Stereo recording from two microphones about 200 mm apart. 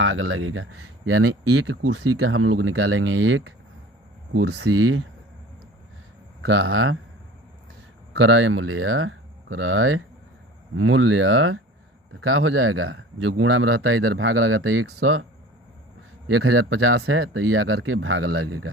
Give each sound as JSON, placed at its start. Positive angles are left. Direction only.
{"t": 0.0, "sound": "speech", "side_deg": -90}
{"t": 4.4, "sound": "speech", "side_deg": -55}
{"t": 6.5, "sound": "speech", "side_deg": -90}
{"t": 8.2, "sound": "speech", "side_deg": -90}
{"t": 16.3, "sound": "speech", "side_deg": -90}